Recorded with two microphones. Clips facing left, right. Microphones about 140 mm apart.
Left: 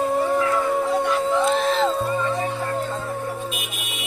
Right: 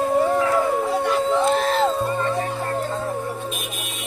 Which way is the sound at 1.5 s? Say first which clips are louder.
Right 1 dB; 45° right (ahead or behind).